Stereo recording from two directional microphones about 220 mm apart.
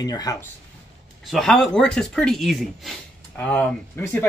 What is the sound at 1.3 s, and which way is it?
Speech, centre (ahead or behind).